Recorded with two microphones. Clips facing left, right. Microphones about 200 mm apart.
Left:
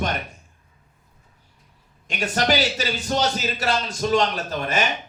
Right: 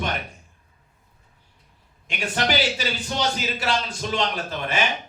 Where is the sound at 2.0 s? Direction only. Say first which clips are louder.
Left 3 dB; 40° left (ahead or behind).